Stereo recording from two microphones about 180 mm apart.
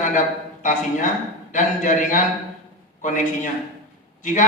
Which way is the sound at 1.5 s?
45° left (ahead or behind).